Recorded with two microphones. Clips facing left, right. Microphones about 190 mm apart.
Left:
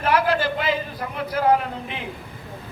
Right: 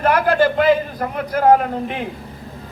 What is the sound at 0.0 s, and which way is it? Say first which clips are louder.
A man's voice: right 5 dB; 50° right (ahead or behind).